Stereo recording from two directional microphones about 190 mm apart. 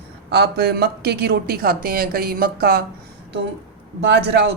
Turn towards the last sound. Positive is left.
turn(degrees=-60)  # may be behind; listen again after turning